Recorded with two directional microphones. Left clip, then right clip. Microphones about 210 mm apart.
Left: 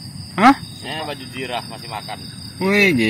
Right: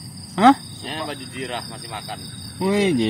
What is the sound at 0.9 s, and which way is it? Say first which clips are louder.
Speech: left 2 dB; 30° left (ahead or behind).